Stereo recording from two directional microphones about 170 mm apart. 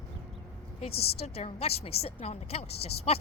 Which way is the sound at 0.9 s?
70° left (ahead or behind).